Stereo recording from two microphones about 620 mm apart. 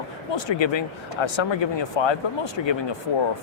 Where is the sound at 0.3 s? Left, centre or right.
Left.